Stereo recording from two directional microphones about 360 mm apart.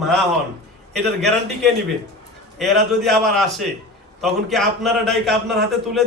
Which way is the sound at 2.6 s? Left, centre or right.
Centre.